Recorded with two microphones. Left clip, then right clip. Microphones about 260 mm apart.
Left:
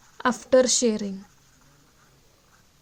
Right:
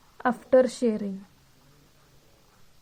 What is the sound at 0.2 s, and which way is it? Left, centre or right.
Speech, left.